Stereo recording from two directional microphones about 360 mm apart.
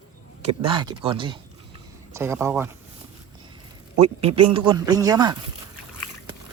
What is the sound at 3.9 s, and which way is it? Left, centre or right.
A man's voice, centre.